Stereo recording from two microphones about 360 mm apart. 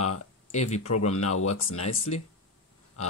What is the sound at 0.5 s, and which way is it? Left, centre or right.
Speech, centre.